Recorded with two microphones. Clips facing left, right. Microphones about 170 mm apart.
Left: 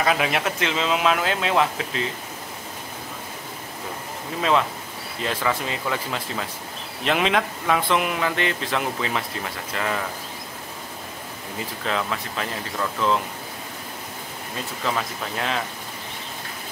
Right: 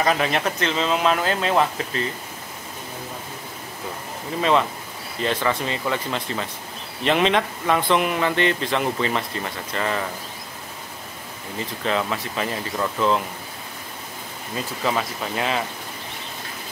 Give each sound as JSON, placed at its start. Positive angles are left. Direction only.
{"t": 0.0, "sound": "speech", "side_deg": 5}
{"t": 4.4, "sound": "speech", "side_deg": 0}
{"t": 11.8, "sound": "speech", "side_deg": 0}
{"t": 14.9, "sound": "speech", "side_deg": -5}